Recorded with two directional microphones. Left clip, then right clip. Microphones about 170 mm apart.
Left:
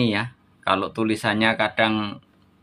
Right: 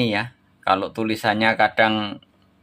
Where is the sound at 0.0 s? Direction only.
5° right (ahead or behind).